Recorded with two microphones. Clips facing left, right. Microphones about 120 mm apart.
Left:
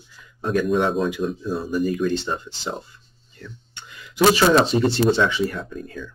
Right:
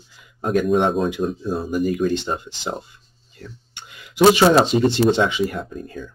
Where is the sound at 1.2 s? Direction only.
35° right (ahead or behind).